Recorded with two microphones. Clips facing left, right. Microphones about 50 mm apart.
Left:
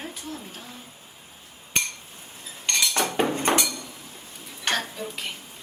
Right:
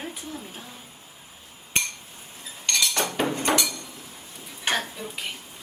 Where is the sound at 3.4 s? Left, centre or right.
Left.